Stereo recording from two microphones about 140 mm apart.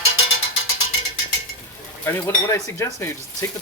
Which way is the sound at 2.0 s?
15° left (ahead or behind).